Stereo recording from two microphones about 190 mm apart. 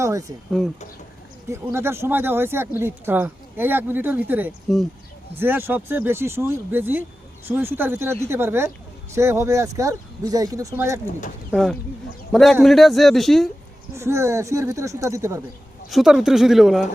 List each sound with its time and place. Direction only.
0.0 s speech: 15° right (ahead or behind)
1.5 s speech: 15° right (ahead or behind)
11.5 s speech: centre (ahead or behind)
13.9 s speech: 15° right (ahead or behind)
15.9 s speech: centre (ahead or behind)